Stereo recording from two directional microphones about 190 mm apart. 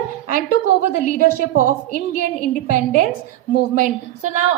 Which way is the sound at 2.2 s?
45° right (ahead or behind).